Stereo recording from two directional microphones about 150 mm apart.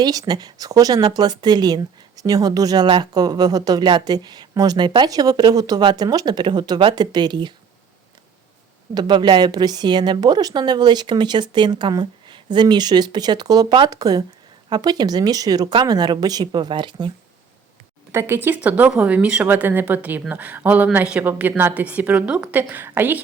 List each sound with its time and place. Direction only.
0.0 s speech: 25° right (ahead or behind)
9.0 s speech: 30° right (ahead or behind)
18.1 s speech: 15° right (ahead or behind)